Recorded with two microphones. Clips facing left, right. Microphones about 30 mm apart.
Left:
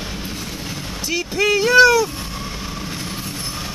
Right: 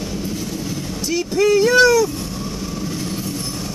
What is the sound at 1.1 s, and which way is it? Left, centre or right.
Vehicle, centre.